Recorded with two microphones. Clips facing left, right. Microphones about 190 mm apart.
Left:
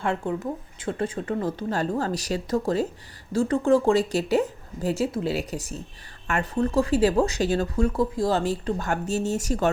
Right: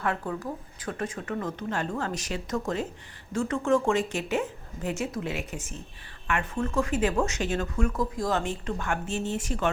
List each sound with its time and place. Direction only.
0.0 s speech: 25° left (ahead or behind); by 9.6 s 40° left (ahead or behind)